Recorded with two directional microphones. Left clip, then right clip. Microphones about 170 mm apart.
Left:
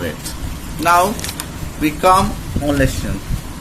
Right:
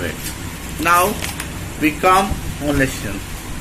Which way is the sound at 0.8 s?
55° left (ahead or behind).